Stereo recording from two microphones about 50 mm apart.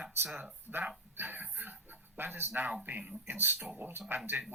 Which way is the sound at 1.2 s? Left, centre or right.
Right.